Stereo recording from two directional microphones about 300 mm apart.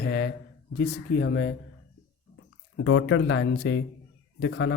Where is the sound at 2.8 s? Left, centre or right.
Left.